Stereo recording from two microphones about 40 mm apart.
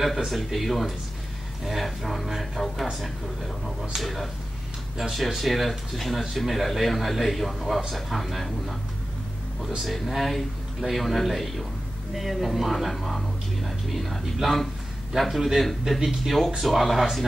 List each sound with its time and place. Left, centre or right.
0.0 s speech: centre
9.8 s speech: centre